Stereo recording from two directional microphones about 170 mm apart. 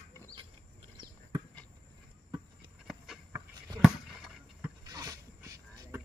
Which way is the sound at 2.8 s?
5° right (ahead or behind).